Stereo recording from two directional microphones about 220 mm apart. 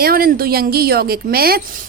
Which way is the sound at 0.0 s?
40° right (ahead or behind).